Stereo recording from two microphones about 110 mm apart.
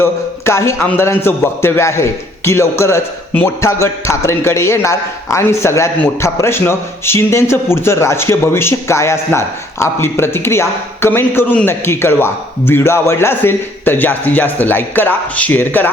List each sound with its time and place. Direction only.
0.0 s a man's voice: 25° left (ahead or behind)